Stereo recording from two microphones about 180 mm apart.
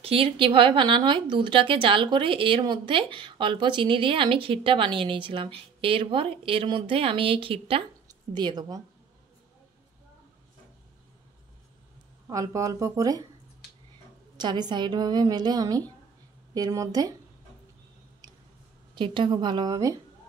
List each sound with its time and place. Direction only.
0.0 s speech: 30° right (ahead or behind)
12.3 s speech: 20° right (ahead or behind)
14.3 s speech: 25° right (ahead or behind)
18.9 s speech: 25° right (ahead or behind)